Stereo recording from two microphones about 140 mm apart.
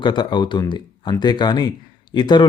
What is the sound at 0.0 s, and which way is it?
Speech, 35° left (ahead or behind).